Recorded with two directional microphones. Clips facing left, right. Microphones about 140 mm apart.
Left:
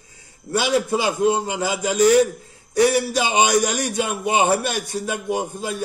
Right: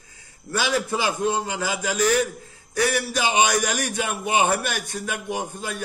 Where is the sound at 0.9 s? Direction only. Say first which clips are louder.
Left 5 dB; 15° left (ahead or behind).